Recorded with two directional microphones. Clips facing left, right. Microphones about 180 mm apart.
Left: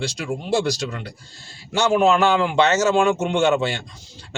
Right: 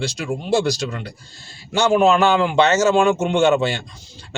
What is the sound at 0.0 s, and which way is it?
Speech, 30° right (ahead or behind).